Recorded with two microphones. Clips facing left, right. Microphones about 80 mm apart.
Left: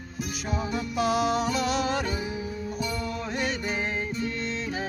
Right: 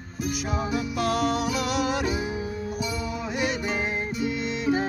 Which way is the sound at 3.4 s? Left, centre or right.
Centre.